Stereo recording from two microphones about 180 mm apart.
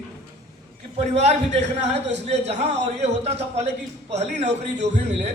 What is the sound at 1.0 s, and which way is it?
A man's voice, 35° right (ahead or behind).